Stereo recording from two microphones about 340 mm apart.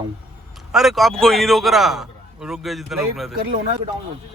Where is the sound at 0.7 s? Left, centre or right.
Centre.